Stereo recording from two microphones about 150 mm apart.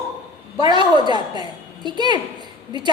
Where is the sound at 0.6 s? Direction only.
30° right (ahead or behind).